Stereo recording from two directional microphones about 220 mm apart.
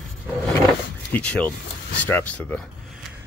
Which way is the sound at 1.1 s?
5° left (ahead or behind).